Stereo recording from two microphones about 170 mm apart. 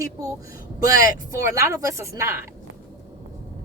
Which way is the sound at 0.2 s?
20° right (ahead or behind).